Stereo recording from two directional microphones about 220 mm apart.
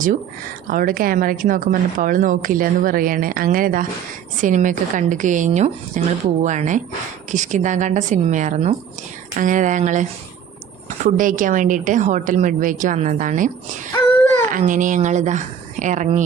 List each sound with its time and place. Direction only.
0.7 s speech: 40° right (ahead or behind)
14.5 s speech: 35° right (ahead or behind)